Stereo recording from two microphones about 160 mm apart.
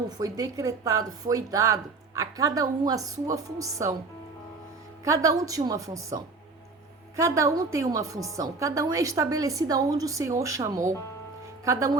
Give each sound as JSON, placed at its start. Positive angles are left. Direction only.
{"t": 0.2, "sound": "speech", "side_deg": -20}
{"t": 5.0, "sound": "speech", "side_deg": -20}
{"t": 7.2, "sound": "speech", "side_deg": -20}